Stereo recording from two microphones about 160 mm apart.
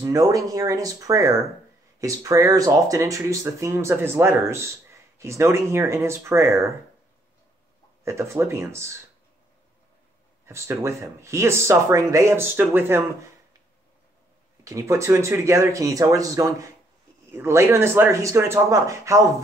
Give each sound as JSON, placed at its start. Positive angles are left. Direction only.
{"t": 0.0, "sound": "speech", "side_deg": -20}
{"t": 8.0, "sound": "speech", "side_deg": -15}
{"t": 10.4, "sound": "speech", "side_deg": -15}
{"t": 14.6, "sound": "speech", "side_deg": -20}